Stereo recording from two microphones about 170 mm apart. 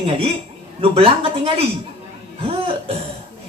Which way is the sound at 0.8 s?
35° right (ahead or behind).